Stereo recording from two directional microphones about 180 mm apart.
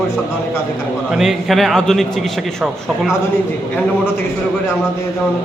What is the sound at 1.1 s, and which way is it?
A man's voice, centre (ahead or behind).